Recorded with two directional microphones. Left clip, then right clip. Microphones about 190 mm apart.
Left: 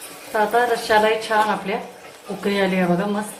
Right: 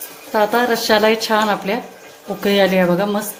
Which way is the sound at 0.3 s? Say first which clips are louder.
Right 3 dB; 55° right (ahead or behind).